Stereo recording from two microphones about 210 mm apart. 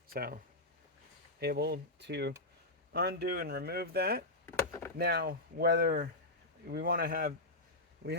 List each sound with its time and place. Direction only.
0.1 s speech: 45° right (ahead or behind)
1.4 s speech: 50° right (ahead or behind)
4.4 s chop: 10° left (ahead or behind)
4.9 s speech: 50° right (ahead or behind)
8.0 s a man's voice: 55° right (ahead or behind)